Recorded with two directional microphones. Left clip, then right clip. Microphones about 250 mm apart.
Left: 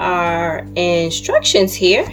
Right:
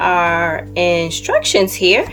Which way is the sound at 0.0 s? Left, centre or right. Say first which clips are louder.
Right 3 dB; centre.